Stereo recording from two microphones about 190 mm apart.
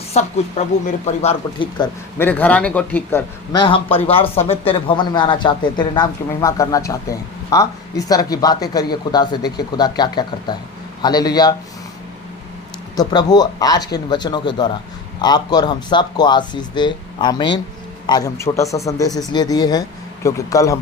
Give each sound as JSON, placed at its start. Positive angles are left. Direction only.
{"t": 0.1, "sound": "speech", "side_deg": 35}
{"t": 1.8, "sound": "speech", "side_deg": 10}
{"t": 3.5, "sound": "speech", "side_deg": 25}
{"t": 13.0, "sound": "speech", "side_deg": 20}